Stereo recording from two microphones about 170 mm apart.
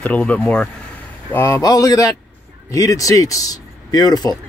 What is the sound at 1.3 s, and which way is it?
Speech, 15° left (ahead or behind).